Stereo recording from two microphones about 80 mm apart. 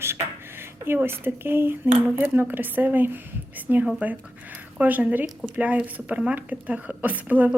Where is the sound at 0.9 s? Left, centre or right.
Right.